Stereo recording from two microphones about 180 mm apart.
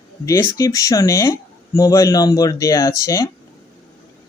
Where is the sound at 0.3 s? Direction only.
20° left (ahead or behind).